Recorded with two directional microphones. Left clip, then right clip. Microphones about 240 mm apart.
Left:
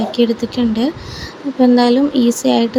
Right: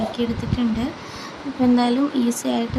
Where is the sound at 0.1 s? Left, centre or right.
Centre.